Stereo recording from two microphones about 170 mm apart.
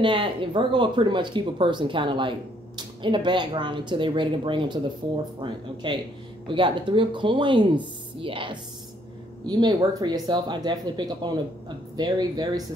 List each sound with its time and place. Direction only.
0.0 s speech: 30° right (ahead or behind)